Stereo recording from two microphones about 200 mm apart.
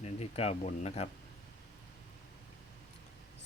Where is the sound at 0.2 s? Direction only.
30° left (ahead or behind).